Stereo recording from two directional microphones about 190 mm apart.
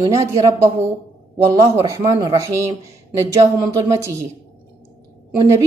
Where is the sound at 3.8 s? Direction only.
15° right (ahead or behind).